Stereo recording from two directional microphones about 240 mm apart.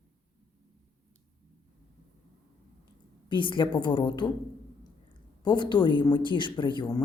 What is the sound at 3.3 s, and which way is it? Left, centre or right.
Speech, centre.